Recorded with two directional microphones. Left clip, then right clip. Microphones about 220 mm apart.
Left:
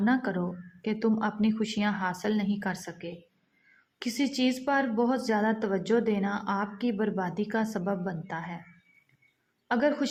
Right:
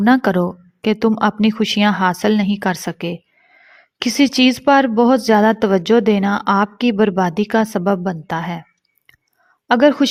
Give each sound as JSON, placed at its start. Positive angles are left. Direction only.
{"t": 0.0, "sound": "a woman's voice", "side_deg": -45}
{"t": 9.6, "sound": "a woman's voice", "side_deg": -40}